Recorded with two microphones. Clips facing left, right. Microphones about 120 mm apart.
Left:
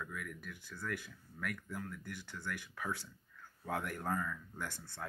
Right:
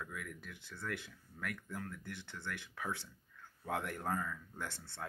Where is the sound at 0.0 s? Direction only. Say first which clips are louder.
Left 1 dB; 25° right (ahead or behind).